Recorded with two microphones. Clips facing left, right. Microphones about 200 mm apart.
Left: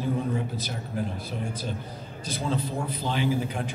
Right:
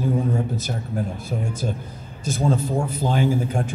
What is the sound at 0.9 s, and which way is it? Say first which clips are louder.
Speech: right 3 dB; 45° right (ahead or behind).